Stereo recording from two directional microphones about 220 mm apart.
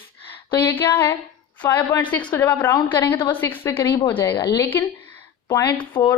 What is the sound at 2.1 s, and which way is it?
A woman's voice, 5° left (ahead or behind).